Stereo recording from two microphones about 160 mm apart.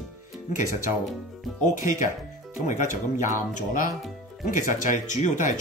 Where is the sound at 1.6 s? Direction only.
55° left (ahead or behind).